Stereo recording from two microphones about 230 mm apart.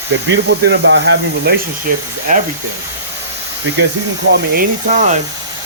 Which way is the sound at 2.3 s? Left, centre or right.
Right.